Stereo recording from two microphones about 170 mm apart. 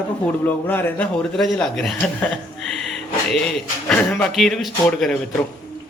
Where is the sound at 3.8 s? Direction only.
5° left (ahead or behind).